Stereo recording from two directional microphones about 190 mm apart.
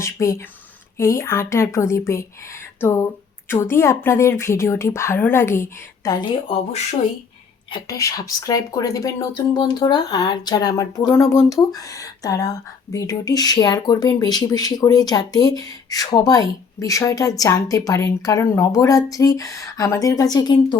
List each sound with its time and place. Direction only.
0.0 s a woman's voice: 15° left (ahead or behind)
7.7 s a woman's voice: 15° left (ahead or behind)